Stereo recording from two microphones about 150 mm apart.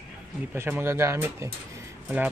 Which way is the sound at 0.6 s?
15° right (ahead or behind).